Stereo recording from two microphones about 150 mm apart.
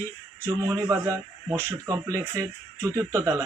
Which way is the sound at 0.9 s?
20° right (ahead or behind).